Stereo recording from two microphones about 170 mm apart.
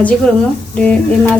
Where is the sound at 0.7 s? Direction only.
5° left (ahead or behind).